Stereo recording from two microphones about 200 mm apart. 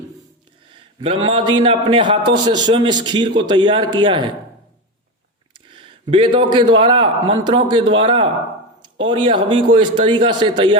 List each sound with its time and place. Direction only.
0.7 s a man's voice: 25° right (ahead or behind)
5.7 s a man's voice: 25° right (ahead or behind)